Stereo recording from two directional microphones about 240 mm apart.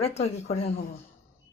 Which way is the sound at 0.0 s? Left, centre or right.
Left.